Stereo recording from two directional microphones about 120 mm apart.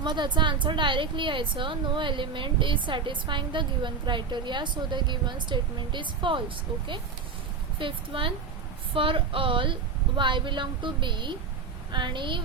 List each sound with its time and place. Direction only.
0.0 s a woman's voice: 40° right (ahead or behind)
7.8 s a woman's voice: 45° right (ahead or behind)